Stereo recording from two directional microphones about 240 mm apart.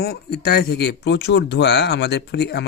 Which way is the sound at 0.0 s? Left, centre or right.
Left.